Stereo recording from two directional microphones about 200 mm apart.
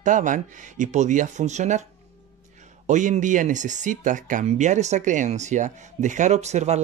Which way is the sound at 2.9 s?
40° right (ahead or behind).